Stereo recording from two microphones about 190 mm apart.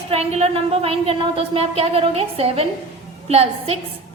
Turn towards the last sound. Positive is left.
turn(degrees=-30)  # may be behind; listen again after turning